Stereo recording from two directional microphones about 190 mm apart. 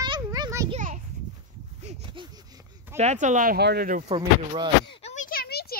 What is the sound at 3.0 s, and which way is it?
Speech, 40° right (ahead or behind).